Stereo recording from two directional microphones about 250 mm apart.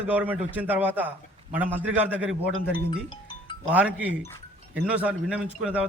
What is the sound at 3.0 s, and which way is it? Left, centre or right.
Music, centre.